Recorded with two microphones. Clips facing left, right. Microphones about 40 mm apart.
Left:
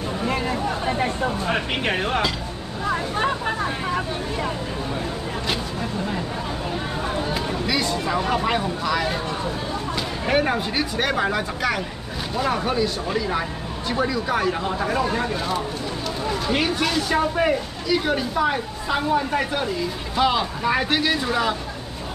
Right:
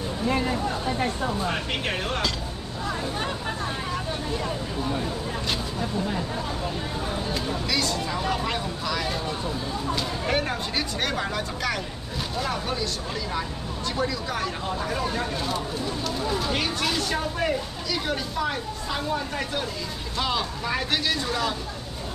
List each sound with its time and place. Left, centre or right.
1.5 s a woman's voice: centre
7.3 s a woman's voice: centre
17.2 s a woman's voice: centre